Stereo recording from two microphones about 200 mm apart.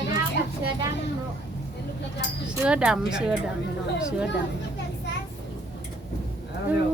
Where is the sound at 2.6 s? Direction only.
5° right (ahead or behind).